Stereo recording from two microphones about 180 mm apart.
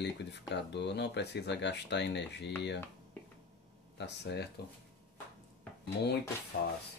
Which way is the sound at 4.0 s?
70° left (ahead or behind).